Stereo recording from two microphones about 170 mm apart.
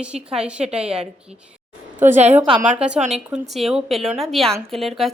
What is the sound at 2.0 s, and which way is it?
Speech, 45° right (ahead or behind).